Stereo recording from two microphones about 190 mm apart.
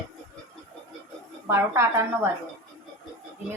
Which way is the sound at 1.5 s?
15° right (ahead or behind).